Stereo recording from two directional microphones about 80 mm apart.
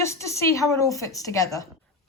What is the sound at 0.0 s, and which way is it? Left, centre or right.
A woman's voice, left.